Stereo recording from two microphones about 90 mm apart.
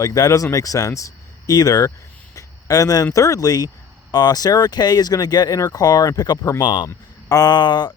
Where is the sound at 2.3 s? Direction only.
45° left (ahead or behind).